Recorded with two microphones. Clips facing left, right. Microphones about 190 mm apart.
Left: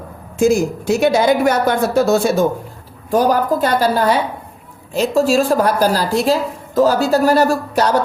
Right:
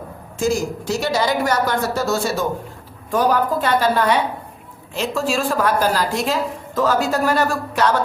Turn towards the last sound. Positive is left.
turn(degrees=40)  # may be behind; listen again after turning